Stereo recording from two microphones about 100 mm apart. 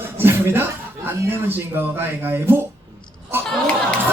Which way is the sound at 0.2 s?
25° right (ahead or behind).